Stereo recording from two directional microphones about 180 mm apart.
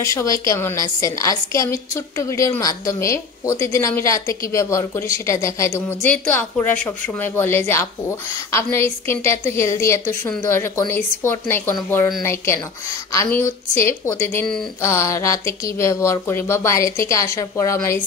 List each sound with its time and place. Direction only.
0.0 s a woman's voice: 15° left (ahead or behind)